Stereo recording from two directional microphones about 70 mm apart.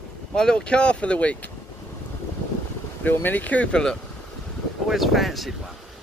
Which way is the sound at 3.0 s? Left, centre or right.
Left.